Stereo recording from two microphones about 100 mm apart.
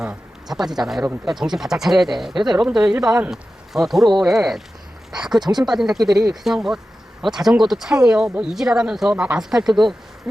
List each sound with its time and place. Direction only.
0.0 s speech: 5° right (ahead or behind)
6.0 s speech: 40° right (ahead or behind)
6.4 s speech: 5° right (ahead or behind)